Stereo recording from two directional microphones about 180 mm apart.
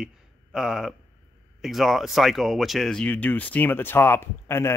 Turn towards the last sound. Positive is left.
turn(degrees=15)  # may be behind; listen again after turning